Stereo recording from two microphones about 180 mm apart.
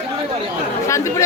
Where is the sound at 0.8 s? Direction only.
15° left (ahead or behind).